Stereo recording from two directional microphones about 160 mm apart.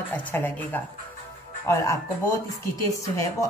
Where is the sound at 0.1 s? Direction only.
10° left (ahead or behind).